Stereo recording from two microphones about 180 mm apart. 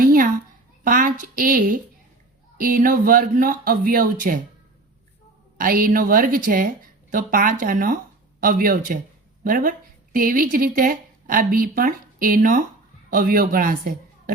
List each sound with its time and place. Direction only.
0.0 s a sound: 55° right (ahead or behind)
0.9 s speech: 50° right (ahead or behind)
5.5 s a woman's voice: 50° right (ahead or behind)